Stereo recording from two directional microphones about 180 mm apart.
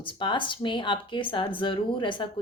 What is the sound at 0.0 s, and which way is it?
Speech, 25° left (ahead or behind).